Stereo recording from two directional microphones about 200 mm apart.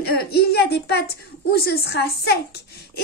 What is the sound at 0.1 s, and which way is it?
A woman's voice, 50° left (ahead or behind).